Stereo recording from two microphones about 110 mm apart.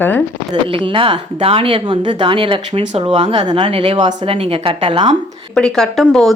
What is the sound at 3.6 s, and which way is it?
Speech, 60° right (ahead or behind).